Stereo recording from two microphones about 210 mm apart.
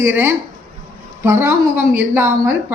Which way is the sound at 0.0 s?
10° right (ahead or behind).